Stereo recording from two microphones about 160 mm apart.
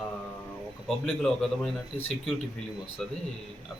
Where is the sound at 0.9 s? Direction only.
Centre (ahead or behind).